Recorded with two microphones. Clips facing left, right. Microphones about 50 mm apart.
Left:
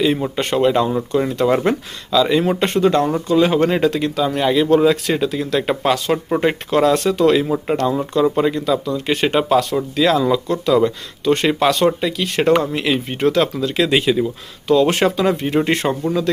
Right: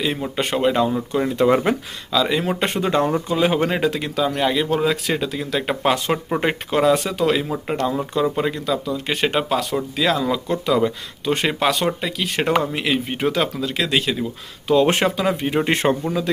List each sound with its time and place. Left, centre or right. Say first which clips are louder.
0.0 s speech: left 5 dB; centre
2.7 s speech: left 4 dB; centre
14.7 s speech: left 2 dB; centre
15.7 s speech: even; right
16.0 s speech: left 4 dB; centre